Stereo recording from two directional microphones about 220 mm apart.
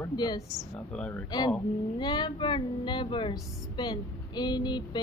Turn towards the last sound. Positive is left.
turn(degrees=20)  # may be behind; listen again after turning